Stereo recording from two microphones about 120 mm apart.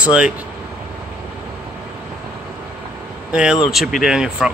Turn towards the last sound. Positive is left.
turn(degrees=-5)  # may be behind; listen again after turning